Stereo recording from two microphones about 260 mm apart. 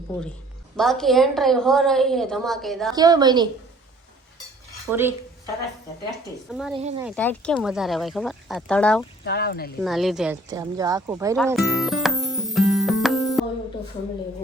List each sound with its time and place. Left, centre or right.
0.8 s a woman's voice: centre
2.9 s speech: centre
4.9 s a woman's voice: centre
6.7 s speech: right
7.2 s a woman's voice: centre
9.2 s speech: left
9.8 s a woman's voice: centre
10.5 s speech: centre
11.4 s music: centre